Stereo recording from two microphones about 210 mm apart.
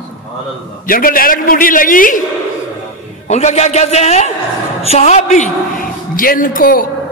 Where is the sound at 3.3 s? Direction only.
35° left (ahead or behind).